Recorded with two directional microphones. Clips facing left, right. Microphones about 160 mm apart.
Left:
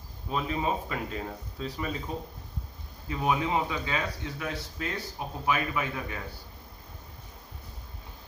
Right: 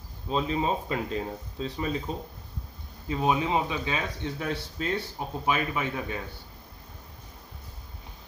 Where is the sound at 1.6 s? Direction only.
25° right (ahead or behind).